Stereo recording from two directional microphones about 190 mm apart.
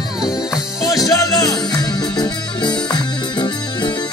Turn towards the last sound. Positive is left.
turn(degrees=20)  # may be behind; listen again after turning